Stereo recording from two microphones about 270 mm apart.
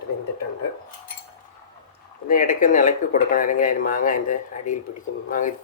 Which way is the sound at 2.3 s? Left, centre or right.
Left.